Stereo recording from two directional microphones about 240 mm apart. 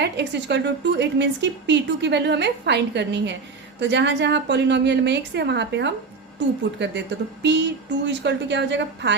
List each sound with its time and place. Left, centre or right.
0.0 s a woman's voice: right